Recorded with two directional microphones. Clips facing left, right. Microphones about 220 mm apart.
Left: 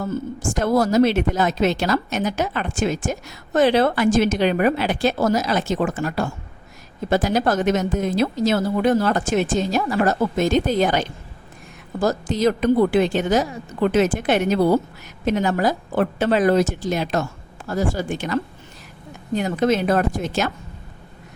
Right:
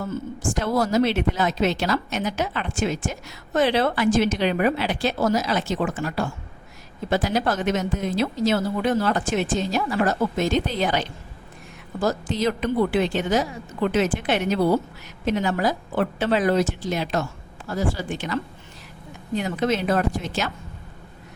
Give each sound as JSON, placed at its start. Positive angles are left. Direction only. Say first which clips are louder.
{"t": 0.6, "sound": "a woman's voice", "louder": "left 4 dB", "side_deg": 45}
{"t": 19.4, "sound": "a woman's voice", "louder": "left 4 dB", "side_deg": 45}